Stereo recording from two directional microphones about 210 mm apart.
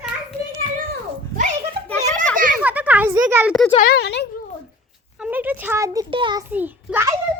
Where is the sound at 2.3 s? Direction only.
40° right (ahead or behind).